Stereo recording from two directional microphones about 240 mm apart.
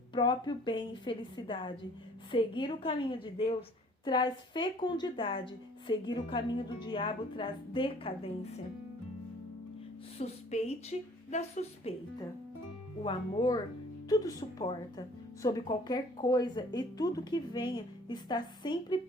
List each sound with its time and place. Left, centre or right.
0.1 s a woman's voice: centre
10.2 s a woman's voice: left